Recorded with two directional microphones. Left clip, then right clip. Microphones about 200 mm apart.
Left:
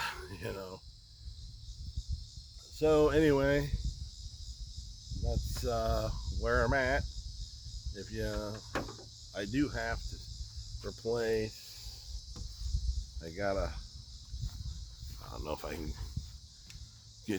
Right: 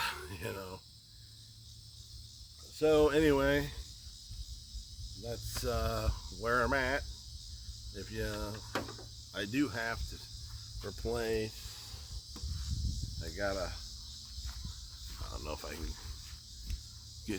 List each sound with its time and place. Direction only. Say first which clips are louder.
0.0 s a sound: right 1 dB; centre (ahead or behind)
2.7 s speech: even; 5° left (ahead or behind)
5.2 s speech: even; 5° left (ahead or behind)
13.1 s speech: left 2 dB; 30° left (ahead or behind)
15.3 s speech: left 3 dB; 35° left (ahead or behind)
17.3 s speech: left 3 dB; 35° left (ahead or behind)